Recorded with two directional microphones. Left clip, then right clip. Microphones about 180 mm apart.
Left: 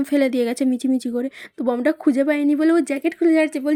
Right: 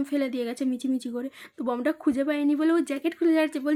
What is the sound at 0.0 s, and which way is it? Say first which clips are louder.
Speech: left 9 dB; 40° left (ahead or behind).